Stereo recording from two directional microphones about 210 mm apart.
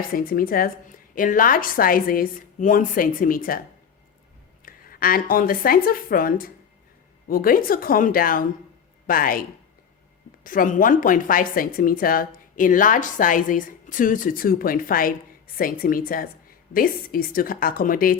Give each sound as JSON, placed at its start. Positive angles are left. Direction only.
{"t": 0.1, "sound": "a woman's voice", "side_deg": 45}
{"t": 4.6, "sound": "a woman's voice", "side_deg": 45}
{"t": 10.4, "sound": "a woman's voice", "side_deg": 40}